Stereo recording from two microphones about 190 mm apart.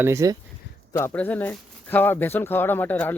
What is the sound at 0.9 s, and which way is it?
Speech, 10° left (ahead or behind).